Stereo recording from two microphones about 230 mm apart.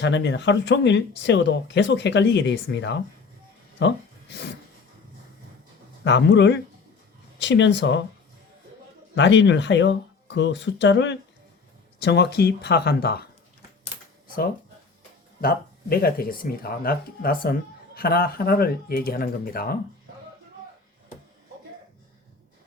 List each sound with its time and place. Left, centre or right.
0.0 s speech: left
3.8 s a sound: left
6.1 s speech: left
9.1 s speech: left
14.3 s a sound: left
15.4 s speech: left